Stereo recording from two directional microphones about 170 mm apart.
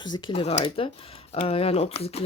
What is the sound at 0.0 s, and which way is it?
Speech, 25° left (ahead or behind).